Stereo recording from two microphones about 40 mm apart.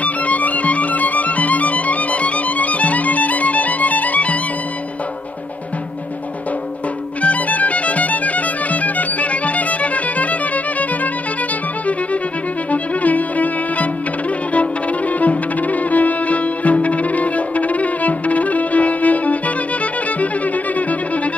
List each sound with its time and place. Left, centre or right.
0.0 s music: left
7.2 s music: left
12.7 s music: left
15.1 s music: left